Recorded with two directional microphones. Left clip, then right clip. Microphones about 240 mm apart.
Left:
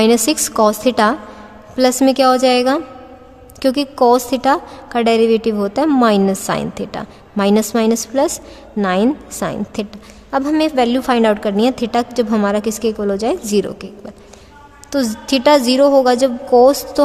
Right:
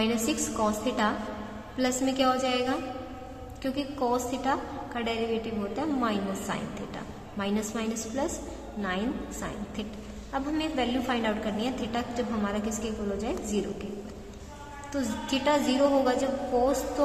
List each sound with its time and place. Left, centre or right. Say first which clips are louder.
0.0 s a woman's voice: left 15 dB; left
14.9 s a woman's voice: left 13 dB; left